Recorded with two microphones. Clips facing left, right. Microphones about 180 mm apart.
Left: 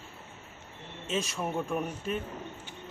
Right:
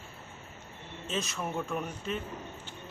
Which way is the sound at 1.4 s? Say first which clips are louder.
Left 2 dB; 10° left (ahead or behind).